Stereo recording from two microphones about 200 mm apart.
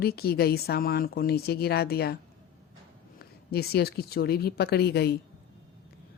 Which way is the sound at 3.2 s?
50° left (ahead or behind).